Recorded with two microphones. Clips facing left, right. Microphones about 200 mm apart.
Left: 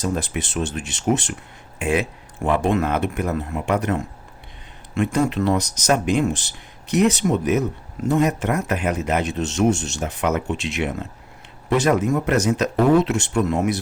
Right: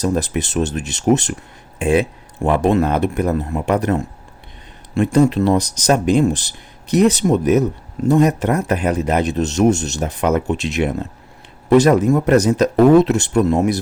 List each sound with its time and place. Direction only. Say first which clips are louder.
0.0 s speech: right 5 dB; 40° right (ahead or behind)